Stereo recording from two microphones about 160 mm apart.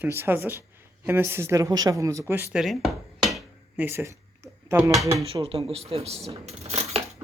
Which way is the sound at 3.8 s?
15° right (ahead or behind).